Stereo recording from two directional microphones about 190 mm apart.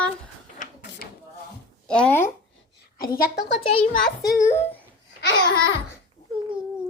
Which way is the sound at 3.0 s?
55° left (ahead or behind).